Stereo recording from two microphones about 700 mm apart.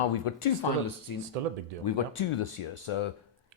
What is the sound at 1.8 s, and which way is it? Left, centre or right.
Speech, left.